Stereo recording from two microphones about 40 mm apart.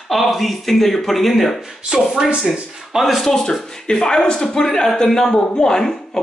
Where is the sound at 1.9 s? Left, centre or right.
Right.